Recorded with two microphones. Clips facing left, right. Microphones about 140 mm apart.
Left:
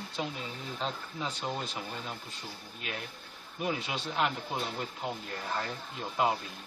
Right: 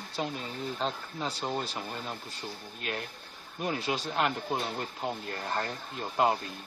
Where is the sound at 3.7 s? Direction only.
40° right (ahead or behind).